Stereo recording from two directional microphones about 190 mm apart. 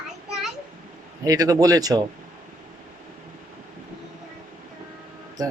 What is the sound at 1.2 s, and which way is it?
Speech, 20° right (ahead or behind).